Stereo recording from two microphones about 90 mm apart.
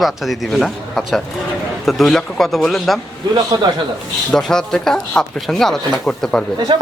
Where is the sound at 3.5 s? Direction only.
45° right (ahead or behind).